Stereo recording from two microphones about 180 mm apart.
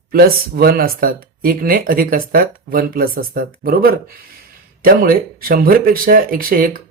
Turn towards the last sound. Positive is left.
turn(degrees=-55)  # may be behind; listen again after turning